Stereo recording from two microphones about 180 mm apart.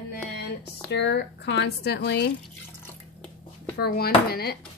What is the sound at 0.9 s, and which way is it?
Speech, 70° left (ahead or behind).